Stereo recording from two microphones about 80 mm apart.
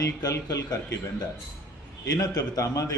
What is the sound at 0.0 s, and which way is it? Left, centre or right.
Speech, left.